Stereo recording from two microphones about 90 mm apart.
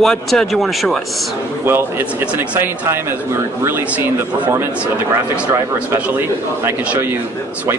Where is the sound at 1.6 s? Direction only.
25° right (ahead or behind).